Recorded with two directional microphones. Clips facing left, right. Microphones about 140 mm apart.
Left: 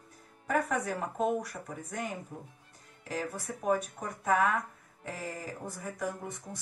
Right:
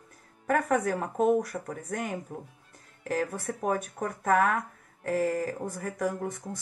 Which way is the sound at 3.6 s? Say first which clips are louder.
Even; 55° right (ahead or behind).